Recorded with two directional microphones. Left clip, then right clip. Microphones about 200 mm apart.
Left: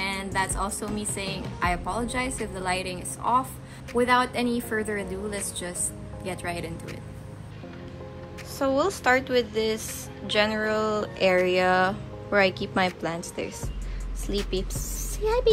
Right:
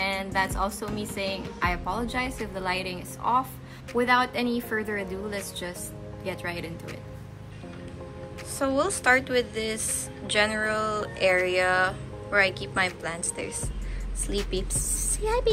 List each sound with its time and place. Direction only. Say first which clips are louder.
0.0 s a woman's voice: right 1 dB; 15° right (ahead or behind)
8.5 s a woman's voice: left 1 dB; 15° left (ahead or behind)